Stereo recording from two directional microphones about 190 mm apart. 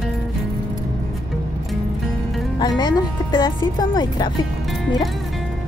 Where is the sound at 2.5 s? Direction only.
25° left (ahead or behind).